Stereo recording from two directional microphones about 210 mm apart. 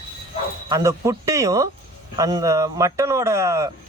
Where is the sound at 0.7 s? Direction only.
15° right (ahead or behind).